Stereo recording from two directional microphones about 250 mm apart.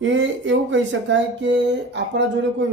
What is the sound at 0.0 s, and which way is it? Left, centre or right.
Speech, right.